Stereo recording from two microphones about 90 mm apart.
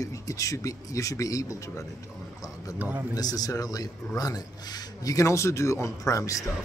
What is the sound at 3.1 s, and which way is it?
Speech, 45° left (ahead or behind).